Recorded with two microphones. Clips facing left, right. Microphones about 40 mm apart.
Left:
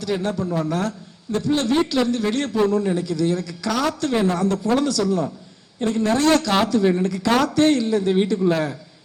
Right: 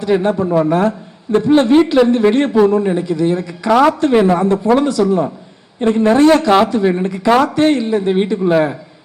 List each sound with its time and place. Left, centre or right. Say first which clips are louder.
0.0 s speech: right 9 dB; right